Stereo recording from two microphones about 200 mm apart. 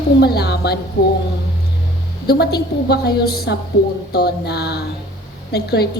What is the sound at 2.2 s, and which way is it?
A woman's voice, 55° left (ahead or behind).